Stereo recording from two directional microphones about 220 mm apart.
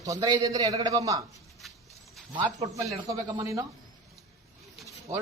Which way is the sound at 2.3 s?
15° right (ahead or behind).